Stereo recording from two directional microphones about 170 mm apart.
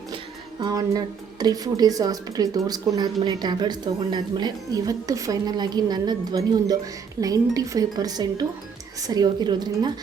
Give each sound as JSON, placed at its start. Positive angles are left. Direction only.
{"t": 0.6, "sound": "a woman's voice", "side_deg": -20}